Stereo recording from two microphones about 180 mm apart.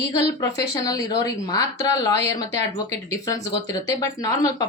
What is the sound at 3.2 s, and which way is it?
Speech, 20° left (ahead or behind).